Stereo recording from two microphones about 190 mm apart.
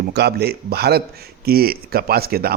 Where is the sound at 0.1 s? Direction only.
60° right (ahead or behind).